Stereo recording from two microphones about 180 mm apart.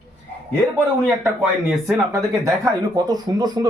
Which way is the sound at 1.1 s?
10° right (ahead or behind).